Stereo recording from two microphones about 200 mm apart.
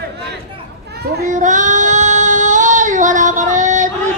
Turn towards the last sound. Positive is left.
turn(degrees=-40)  # may be behind; listen again after turning